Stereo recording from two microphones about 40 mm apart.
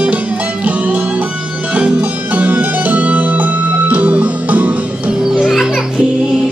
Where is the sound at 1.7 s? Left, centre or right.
Right.